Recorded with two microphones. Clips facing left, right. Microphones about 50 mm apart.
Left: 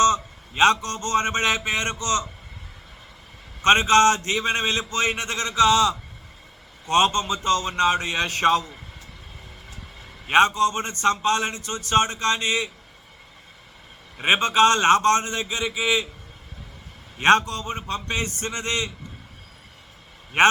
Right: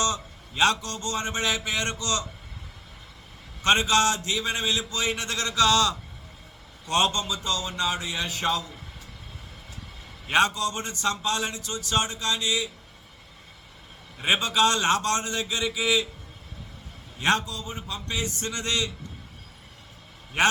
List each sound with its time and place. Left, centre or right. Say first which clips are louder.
0.0 s speech: left 8 dB; left
3.6 s a man's voice: left 5 dB; left; by 6.0 s centre
6.8 s a man's voice: left 5 dB; left
10.2 s a man's voice: left 5 dB; left
14.2 s a man's voice: left 5 dB; left
17.2 s a man's voice: left 7 dB; left
20.4 s a man's voice: left 5 dB; left